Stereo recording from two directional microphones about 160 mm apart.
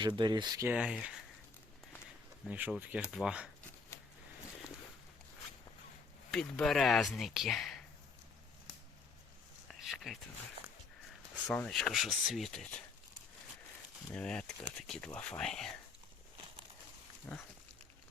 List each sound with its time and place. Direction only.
0.0 s speech: 30° right (ahead or behind)
0.7 s speech: 5° right (ahead or behind)
2.5 s speech: 10° right (ahead or behind)
6.3 s speech: 5° left (ahead or behind)
9.6 s a sound: centre (ahead or behind)
11.4 s speech: 5° left (ahead or behind)
14.1 s speech: 5° left (ahead or behind)
17.3 s speech: 15° left (ahead or behind)